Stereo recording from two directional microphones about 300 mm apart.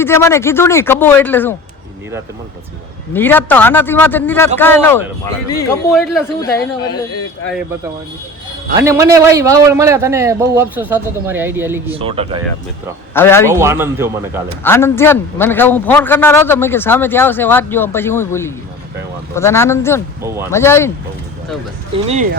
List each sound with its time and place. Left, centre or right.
0.0 s a man's voice: centre
3.1 s a man's voice: centre
8.8 s a man's voice: centre
11.9 s speech: centre
13.1 s a man's voice: centre
13.5 s a man's voice: centre
14.6 s a man's voice: centre
20.2 s a man's voice: centre
20.5 s a man's voice: centre
21.9 s speech: right